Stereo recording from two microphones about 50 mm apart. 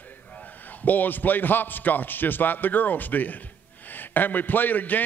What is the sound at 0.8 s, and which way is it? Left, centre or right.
A man's voice, left.